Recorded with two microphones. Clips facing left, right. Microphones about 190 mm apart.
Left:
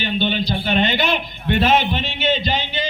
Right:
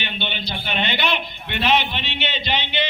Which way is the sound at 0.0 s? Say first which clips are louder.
Left 9 dB; 40° left (ahead or behind).